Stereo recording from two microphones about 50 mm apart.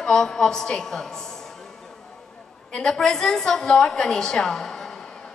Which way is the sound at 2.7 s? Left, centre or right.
Centre.